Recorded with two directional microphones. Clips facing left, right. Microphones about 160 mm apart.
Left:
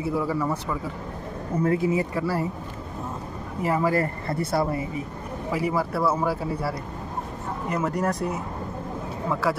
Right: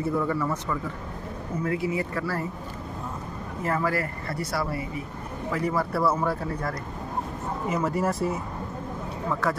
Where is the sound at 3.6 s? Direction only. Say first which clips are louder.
Left 4 dB; 15° left (ahead or behind).